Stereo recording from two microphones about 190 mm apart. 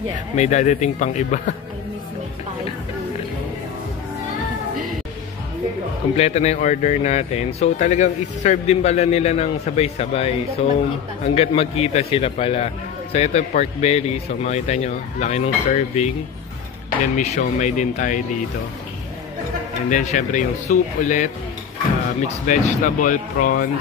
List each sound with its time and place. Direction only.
0.4 s a man's voice: 40° left (ahead or behind)
6.1 s a man's voice: 35° left (ahead or behind)
11.3 s a man's voice: 30° left (ahead or behind)
19.9 s a man's voice: 40° left (ahead or behind)
22.5 s speech: 45° left (ahead or behind)